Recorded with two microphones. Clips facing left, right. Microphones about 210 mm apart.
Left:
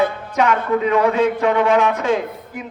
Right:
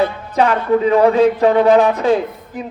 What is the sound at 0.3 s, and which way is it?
A man's voice, 35° right (ahead or behind).